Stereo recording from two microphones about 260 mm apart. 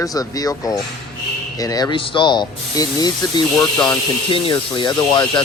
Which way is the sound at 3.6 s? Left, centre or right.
Centre.